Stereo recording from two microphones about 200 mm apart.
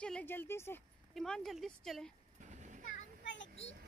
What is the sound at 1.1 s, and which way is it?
Speech, centre (ahead or behind).